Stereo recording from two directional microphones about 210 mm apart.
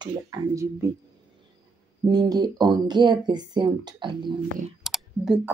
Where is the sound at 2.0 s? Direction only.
20° right (ahead or behind).